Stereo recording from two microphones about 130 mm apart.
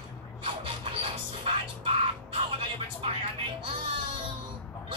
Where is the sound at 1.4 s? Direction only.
45° right (ahead or behind).